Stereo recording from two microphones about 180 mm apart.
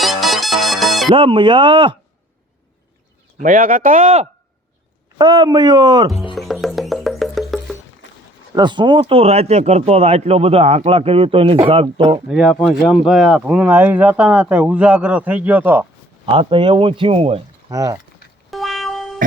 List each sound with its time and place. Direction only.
0.0 s music: centre (ahead or behind)
1.1 s speech: 30° right (ahead or behind)
3.4 s speech: 50° right (ahead or behind)
5.1 s speech: 25° right (ahead or behind)
6.3 s music: centre (ahead or behind)
8.5 s speech: 25° right (ahead or behind)
12.3 s speech: 5° right (ahead or behind)
16.2 s speech: 30° right (ahead or behind)
17.7 s speech: 20° right (ahead or behind)
18.5 s cat: centre (ahead or behind)